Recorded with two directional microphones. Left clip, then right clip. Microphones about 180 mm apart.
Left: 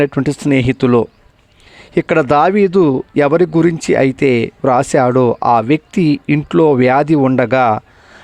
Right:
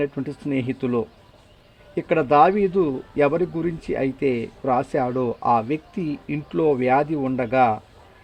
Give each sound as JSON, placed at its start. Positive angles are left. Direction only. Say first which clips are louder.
{"t": 0.0, "sound": "speech", "louder": "left 11 dB", "side_deg": 45}